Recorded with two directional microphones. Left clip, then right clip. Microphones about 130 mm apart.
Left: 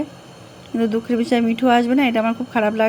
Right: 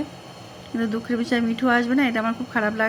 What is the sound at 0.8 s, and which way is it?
Speech, 20° left (ahead or behind).